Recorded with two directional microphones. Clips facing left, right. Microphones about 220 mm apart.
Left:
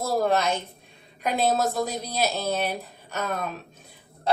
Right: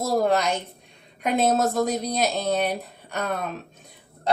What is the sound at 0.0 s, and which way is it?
A woman's voice, 15° right (ahead or behind).